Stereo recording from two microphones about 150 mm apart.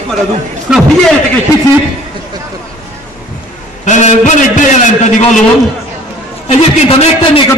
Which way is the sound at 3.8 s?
50° left (ahead or behind).